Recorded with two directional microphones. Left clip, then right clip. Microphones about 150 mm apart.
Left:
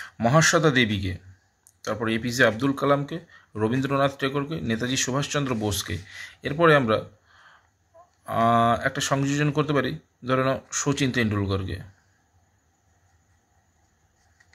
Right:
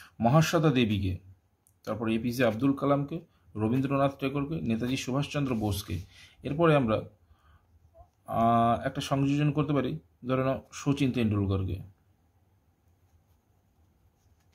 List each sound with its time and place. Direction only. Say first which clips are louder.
0.0 s speech: left 6 dB; 5° left (ahead or behind)